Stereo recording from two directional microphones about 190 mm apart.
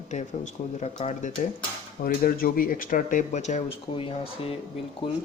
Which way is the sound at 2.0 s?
50° left (ahead or behind).